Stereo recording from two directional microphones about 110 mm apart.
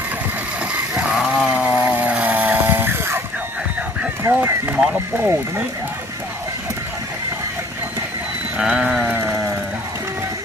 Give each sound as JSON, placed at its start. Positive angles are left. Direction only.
{"t": 0.9, "sound": "chainsaw", "side_deg": -5}
{"t": 4.2, "sound": "speech", "side_deg": -20}
{"t": 8.5, "sound": "sheep", "side_deg": -10}